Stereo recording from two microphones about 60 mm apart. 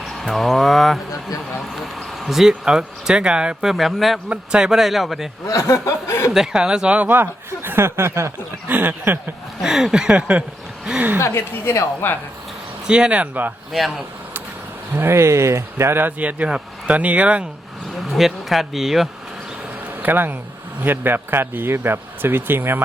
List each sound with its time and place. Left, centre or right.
0.0 s speech: centre
3.7 s speech: centre
4.3 s speech: centre
5.5 s speech: left
6.3 s speech: centre
7.1 s speech: right
8.7 s speech: right
9.6 s speech: centre
11.2 s a woman's voice: left
12.9 s speech: centre
14.9 s speech: right
16.0 s speech: right
18.1 s speech: centre
20.0 s speech: right